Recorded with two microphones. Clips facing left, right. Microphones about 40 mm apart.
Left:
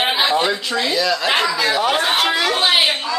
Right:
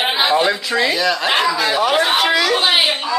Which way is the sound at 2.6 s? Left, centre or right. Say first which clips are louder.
Even; centre.